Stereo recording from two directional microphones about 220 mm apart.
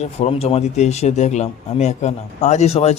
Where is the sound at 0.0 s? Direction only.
25° left (ahead or behind).